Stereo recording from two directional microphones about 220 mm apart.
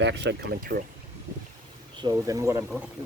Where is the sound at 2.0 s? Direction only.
15° right (ahead or behind).